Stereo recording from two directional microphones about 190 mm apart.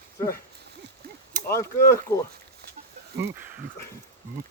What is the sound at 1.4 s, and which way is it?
Speech, 15° left (ahead or behind).